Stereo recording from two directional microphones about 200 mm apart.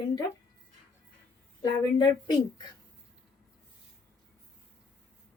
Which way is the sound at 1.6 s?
20° left (ahead or behind).